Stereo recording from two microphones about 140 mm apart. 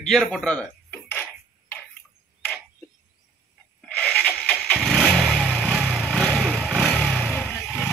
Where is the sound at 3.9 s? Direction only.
10° left (ahead or behind).